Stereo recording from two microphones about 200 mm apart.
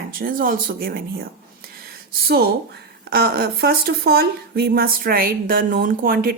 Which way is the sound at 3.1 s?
50° right (ahead or behind).